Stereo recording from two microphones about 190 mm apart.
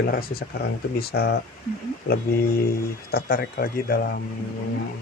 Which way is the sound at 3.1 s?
50° left (ahead or behind).